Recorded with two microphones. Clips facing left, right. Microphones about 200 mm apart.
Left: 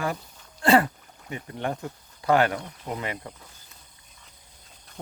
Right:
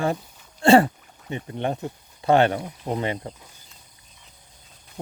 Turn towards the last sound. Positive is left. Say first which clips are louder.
# right 6 dB
turn(degrees=-30)  # may be behind; listen again after turning